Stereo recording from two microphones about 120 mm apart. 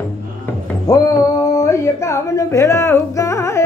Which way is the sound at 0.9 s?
30° left (ahead or behind).